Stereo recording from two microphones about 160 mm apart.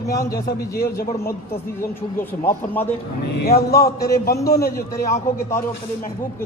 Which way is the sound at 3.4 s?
70° left (ahead or behind).